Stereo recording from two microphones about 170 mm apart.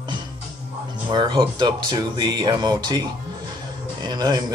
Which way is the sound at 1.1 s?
25° right (ahead or behind).